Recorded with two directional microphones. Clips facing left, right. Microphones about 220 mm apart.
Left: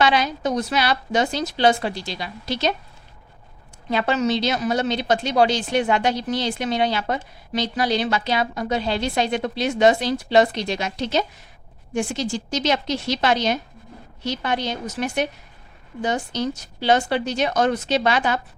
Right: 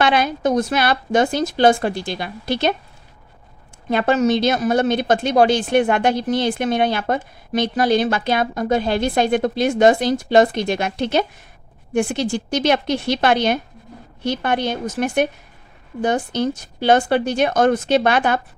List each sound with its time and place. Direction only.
0.0 s a woman's voice: 55° right (ahead or behind)
3.8 s a woman's voice: 50° right (ahead or behind)